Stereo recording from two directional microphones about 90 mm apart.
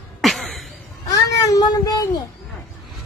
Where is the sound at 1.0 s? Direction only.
40° left (ahead or behind).